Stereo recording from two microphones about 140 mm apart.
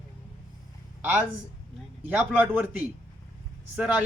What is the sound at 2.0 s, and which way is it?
Speech, 15° right (ahead or behind).